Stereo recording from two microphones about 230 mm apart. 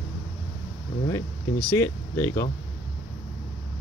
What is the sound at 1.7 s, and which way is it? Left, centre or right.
Speech, centre.